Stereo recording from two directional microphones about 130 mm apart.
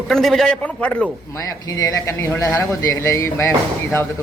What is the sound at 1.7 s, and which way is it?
A man's voice, 25° left (ahead or behind).